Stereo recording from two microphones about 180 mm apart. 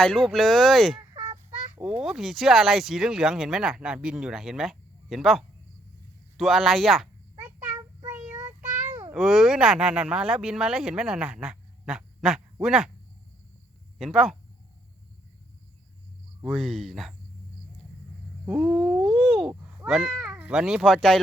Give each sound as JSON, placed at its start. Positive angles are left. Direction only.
{"t": 0.0, "sound": "speech", "side_deg": 5}
{"t": 1.1, "sound": "a sound", "side_deg": -20}
{"t": 1.8, "sound": "speech", "side_deg": -5}
{"t": 7.3, "sound": "child singing", "side_deg": -10}
{"t": 9.1, "sound": "speech", "side_deg": 0}
{"t": 14.0, "sound": "speech", "side_deg": 0}
{"t": 16.5, "sound": "speech", "side_deg": 0}
{"t": 18.4, "sound": "speech", "side_deg": -5}